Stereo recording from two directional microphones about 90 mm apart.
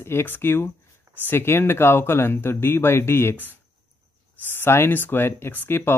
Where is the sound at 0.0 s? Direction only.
25° left (ahead or behind).